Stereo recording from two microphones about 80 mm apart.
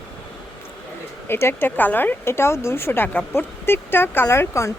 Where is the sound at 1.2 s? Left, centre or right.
Left.